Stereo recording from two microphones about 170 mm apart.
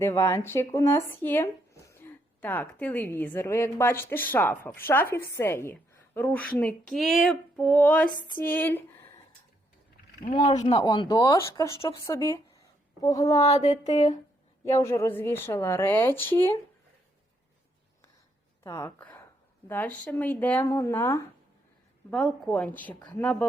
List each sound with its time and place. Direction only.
0.0 s a woman's voice: 15° left (ahead or behind)
10.2 s speech: 25° left (ahead or behind)
13.5 s a sound: 40° left (ahead or behind)
14.6 s a woman's voice: 15° left (ahead or behind)
18.6 s a woman's voice: 15° left (ahead or behind)